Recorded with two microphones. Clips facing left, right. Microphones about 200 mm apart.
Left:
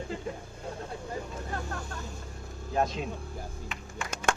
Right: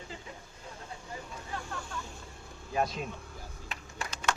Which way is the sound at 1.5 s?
45° left (ahead or behind).